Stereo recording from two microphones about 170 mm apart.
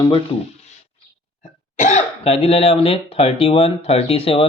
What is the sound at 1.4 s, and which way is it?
Speech, 45° left (ahead or behind).